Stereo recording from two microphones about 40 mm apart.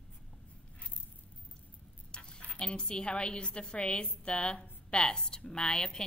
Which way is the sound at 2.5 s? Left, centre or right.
Left.